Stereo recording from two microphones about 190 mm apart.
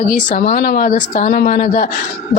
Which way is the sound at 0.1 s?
50° left (ahead or behind).